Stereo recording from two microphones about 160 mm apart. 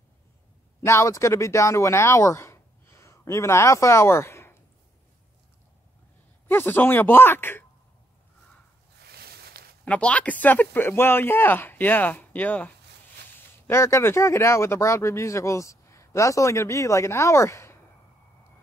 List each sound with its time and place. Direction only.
0.7 s speech: 15° left (ahead or behind)
6.5 s speech: 15° left (ahead or behind)
9.0 s a sound: 80° right
9.8 s speech: 10° left (ahead or behind)